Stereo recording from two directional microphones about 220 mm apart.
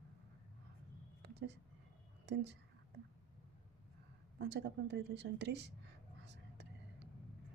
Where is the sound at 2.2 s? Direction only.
50° right (ahead or behind).